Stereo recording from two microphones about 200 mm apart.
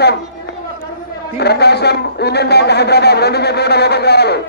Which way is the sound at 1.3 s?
55° left (ahead or behind).